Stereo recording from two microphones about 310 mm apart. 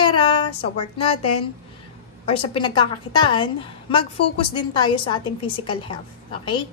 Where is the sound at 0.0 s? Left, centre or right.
Centre.